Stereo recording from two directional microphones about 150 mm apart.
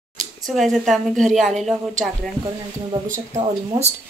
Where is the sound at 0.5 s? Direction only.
Centre (ahead or behind).